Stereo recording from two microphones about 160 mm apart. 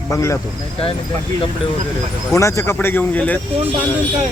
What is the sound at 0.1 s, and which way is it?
Speech, 20° left (ahead or behind).